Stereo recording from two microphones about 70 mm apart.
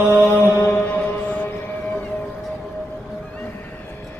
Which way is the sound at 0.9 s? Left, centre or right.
Centre.